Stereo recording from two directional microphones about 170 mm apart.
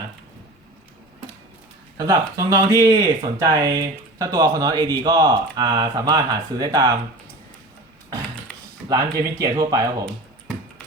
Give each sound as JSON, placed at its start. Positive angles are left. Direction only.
{"t": 2.0, "sound": "speech", "side_deg": -20}
{"t": 8.9, "sound": "speech", "side_deg": -20}